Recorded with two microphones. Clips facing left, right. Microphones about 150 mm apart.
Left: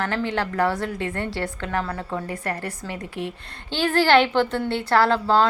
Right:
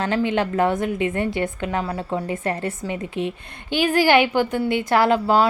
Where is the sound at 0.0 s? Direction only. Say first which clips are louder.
Right 4 dB; 20° right (ahead or behind).